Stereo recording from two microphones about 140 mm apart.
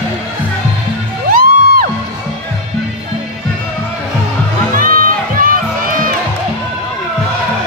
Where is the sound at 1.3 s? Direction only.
90° right.